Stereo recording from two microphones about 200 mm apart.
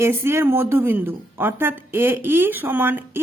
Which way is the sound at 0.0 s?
10° right (ahead or behind).